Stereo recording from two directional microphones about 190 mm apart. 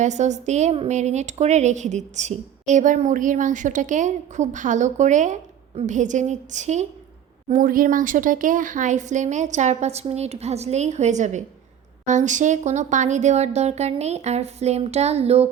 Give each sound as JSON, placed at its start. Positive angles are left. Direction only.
{"t": 0.0, "sound": "a woman's voice", "side_deg": -40}